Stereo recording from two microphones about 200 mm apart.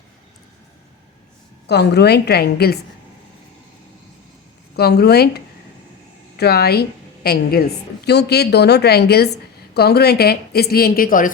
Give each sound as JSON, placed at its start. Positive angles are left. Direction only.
{"t": 1.6, "sound": "a woman's voice", "side_deg": 55}
{"t": 4.8, "sound": "a woman's voice", "side_deg": 50}